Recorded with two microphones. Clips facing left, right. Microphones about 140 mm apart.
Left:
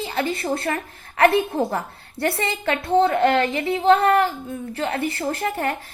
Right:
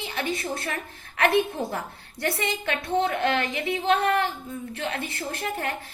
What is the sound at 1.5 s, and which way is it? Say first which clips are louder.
Speech: left 7 dB; 65° left (ahead or behind).